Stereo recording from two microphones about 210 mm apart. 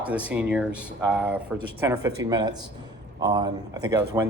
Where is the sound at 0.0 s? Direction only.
5° right (ahead or behind).